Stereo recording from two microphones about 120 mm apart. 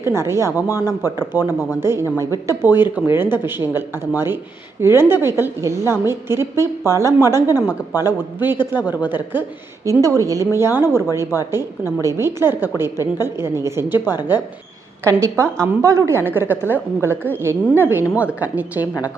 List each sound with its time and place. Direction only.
0.0 s a woman's voice: 20° right (ahead or behind)
7.5 s a woman's voice: 30° left (ahead or behind)
8.0 s a man's voice: 15° right (ahead or behind)
9.8 s a woman's voice: 25° right (ahead or behind)
13.9 s a woman's voice: 35° left (ahead or behind)
15.0 s a woman's voice: 25° right (ahead or behind)